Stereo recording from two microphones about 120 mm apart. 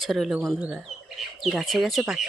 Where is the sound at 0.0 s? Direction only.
Centre (ahead or behind).